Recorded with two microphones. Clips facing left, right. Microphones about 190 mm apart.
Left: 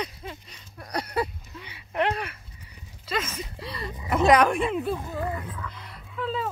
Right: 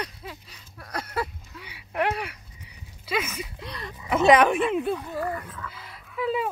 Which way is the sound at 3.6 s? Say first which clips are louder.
Left 2 dB; centre (ahead or behind).